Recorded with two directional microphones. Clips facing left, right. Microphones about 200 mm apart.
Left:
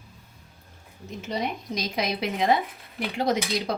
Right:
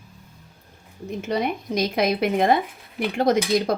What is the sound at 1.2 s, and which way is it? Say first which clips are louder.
A woman's voice: right 5 dB; 55° right (ahead or behind).